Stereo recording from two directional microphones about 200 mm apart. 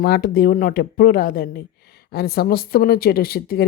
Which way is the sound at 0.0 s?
50° left (ahead or behind).